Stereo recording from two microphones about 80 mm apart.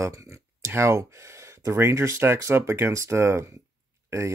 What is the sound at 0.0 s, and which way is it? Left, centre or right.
Speech, right.